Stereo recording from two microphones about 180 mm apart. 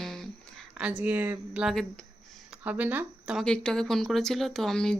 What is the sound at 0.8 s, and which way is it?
Speech, 5° right (ahead or behind).